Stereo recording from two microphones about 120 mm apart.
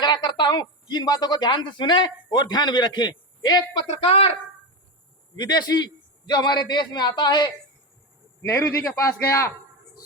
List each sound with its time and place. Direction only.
0.0 s speech: 35° left (ahead or behind)
4.0 s speech: 55° left (ahead or behind)
5.4 s speech: 35° left (ahead or behind)
8.4 s a man's voice: 20° left (ahead or behind)